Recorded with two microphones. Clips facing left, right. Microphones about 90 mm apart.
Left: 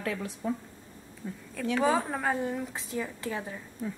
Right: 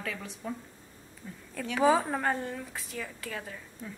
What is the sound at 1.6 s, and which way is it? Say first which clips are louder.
Speech: right 1 dB; centre (ahead or behind).